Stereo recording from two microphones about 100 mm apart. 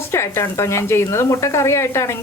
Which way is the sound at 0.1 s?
30° left (ahead or behind).